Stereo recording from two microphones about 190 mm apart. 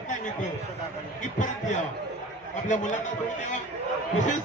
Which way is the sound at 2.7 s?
40° left (ahead or behind).